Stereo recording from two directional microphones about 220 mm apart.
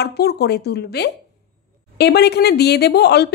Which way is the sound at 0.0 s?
45° left (ahead or behind).